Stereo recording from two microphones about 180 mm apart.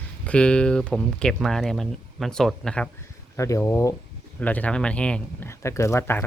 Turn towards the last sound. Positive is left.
turn(degrees=10)  # may be behind; listen again after turning